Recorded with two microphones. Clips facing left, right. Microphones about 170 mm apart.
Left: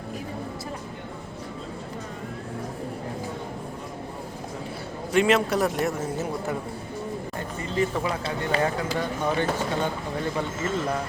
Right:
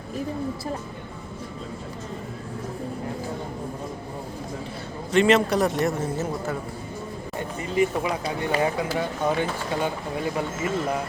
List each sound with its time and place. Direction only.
5.1 s a man's voice: 5° left (ahead or behind)
7.3 s a sound: 15° right (ahead or behind)
8.4 s speech: 15° right (ahead or behind)